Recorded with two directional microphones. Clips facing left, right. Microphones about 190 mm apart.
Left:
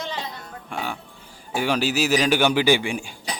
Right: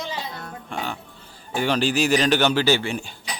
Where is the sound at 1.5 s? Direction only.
10° left (ahead or behind).